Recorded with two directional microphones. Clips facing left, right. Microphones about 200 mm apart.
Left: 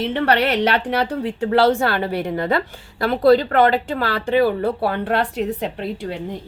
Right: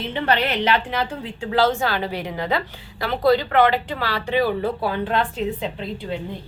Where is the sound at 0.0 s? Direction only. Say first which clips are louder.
Left 4 dB; 70° left (ahead or behind).